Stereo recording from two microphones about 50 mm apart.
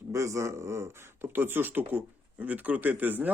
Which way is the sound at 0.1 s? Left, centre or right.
Right.